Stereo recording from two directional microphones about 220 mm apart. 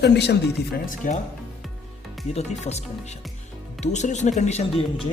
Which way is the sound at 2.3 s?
30° left (ahead or behind).